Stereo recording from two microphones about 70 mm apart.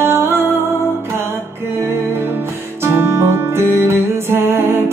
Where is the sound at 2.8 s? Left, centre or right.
Right.